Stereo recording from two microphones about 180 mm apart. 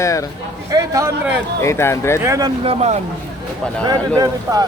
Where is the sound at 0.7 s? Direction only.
20° right (ahead or behind).